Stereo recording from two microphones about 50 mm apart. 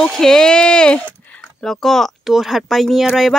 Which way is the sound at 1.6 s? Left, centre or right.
Centre.